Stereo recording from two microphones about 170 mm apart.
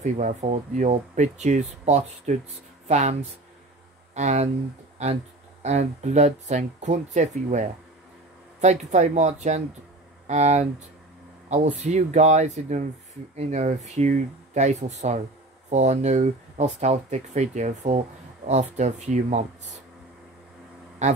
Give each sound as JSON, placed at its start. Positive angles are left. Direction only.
{"t": 0.0, "sound": "speech", "side_deg": -45}
{"t": 21.0, "sound": "speech", "side_deg": -45}